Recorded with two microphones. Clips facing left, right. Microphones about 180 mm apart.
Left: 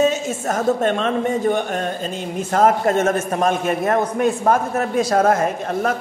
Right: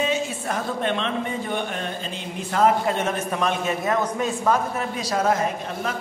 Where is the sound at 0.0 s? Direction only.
45° left (ahead or behind).